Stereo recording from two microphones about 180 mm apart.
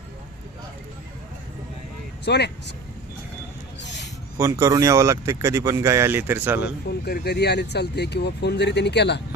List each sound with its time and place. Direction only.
2.2 s speech: 70° left (ahead or behind)
3.8 s a sound: 75° left (ahead or behind)
4.4 s speech: 15° right (ahead or behind)
6.8 s speech: 65° left (ahead or behind)